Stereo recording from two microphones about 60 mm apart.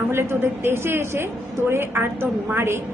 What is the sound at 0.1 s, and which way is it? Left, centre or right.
A woman's voice, right.